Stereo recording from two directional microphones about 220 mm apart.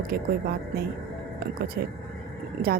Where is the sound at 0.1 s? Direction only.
45° right (ahead or behind).